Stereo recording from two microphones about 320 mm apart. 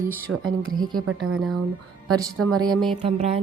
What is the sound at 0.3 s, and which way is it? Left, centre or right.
Speech, right.